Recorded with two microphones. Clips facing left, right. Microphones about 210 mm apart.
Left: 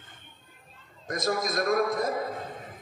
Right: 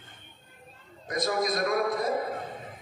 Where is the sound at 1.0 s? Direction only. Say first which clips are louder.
Right 1 dB; 45° left (ahead or behind).